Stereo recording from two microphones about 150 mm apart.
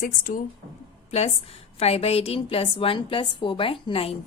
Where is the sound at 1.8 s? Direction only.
40° left (ahead or behind).